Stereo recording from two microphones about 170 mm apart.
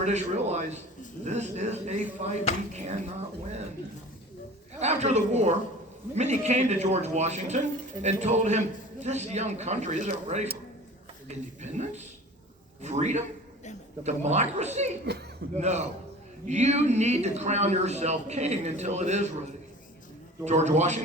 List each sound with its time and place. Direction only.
0.0 s speech: 40° right (ahead or behind)
4.8 s speech: 40° right (ahead or behind)
15.1 s speech: 75° right (ahead or behind)
15.5 s speech: 40° right (ahead or behind)
20.4 s speech: 40° right (ahead or behind)